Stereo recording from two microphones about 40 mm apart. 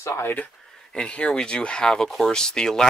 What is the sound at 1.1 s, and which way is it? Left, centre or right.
Speech, left.